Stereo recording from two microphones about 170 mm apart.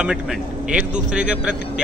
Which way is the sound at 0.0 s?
5° right (ahead or behind).